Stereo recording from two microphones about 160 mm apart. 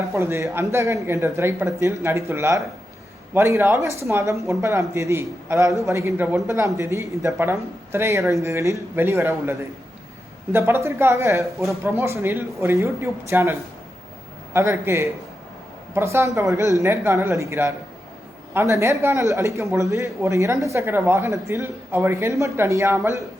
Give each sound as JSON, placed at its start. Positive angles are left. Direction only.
{"t": 0.1, "sound": "a man's voice", "side_deg": -15}